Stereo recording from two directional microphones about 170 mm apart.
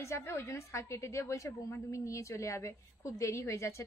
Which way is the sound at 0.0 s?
15° left (ahead or behind).